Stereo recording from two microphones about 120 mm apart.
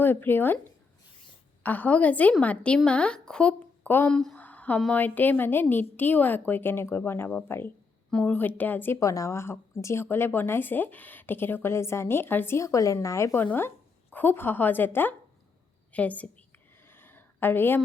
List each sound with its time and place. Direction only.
0.0 s a woman's voice: 15° left (ahead or behind)
1.6 s a woman's voice: 15° left (ahead or behind)
4.1 s a sound: 5° left (ahead or behind)
4.8 s a woman's voice: 10° left (ahead or behind)
9.0 s a woman's voice: 25° left (ahead or behind); by 16.3 s 10° left (ahead or behind)
16.8 s a sound: 20° left (ahead or behind)